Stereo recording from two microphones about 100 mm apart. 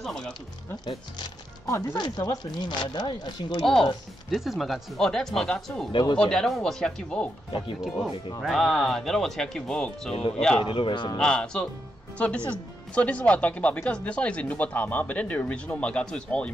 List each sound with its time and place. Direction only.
0.0 s speech: 5° left (ahead or behind)
1.7 s speech: 30° left (ahead or behind)
2.0 s speech: 45° left (ahead or behind)
4.3 s speech: centre (ahead or behind)
5.9 s speech: 50° left (ahead or behind)
6.1 s speech: 5° left (ahead or behind)
8.4 s speech: centre (ahead or behind)
10.6 s speech: 55° left (ahead or behind)
11.1 s speech: 5° left (ahead or behind)